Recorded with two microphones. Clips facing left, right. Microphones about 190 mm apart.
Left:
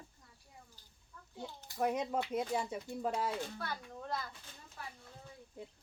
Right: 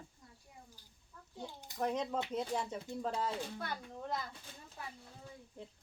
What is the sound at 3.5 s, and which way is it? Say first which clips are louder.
Speech: even; 20° right (ahead or behind).